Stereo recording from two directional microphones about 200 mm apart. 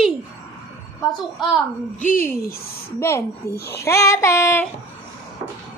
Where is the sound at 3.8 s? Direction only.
15° left (ahead or behind).